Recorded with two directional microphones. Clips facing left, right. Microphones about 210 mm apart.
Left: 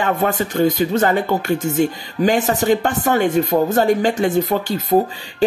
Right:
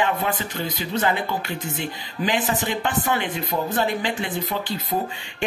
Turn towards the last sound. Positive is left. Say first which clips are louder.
# left 10 dB
turn(degrees=45)  # may be behind; listen again after turning